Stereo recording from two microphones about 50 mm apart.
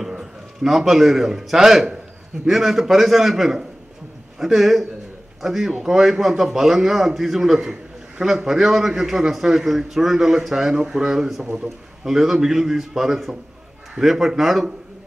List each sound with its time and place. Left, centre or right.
0.0 s a man's voice: centre